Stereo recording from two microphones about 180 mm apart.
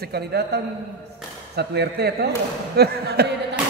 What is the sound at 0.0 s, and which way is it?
Speech, 65° right (ahead or behind).